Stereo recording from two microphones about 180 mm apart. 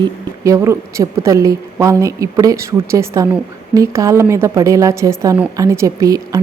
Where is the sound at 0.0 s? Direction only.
20° right (ahead or behind).